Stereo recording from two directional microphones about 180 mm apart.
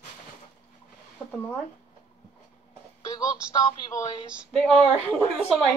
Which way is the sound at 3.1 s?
20° left (ahead or behind).